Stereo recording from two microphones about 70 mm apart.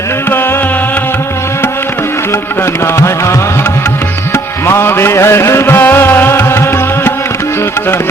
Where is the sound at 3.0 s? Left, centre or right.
Left.